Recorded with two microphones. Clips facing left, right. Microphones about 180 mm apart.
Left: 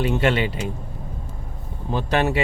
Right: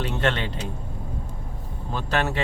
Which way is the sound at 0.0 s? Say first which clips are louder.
Left 5 dB; 10° left (ahead or behind).